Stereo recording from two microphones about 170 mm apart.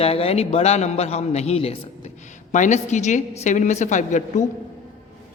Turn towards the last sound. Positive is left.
turn(degrees=45)  # may be behind; listen again after turning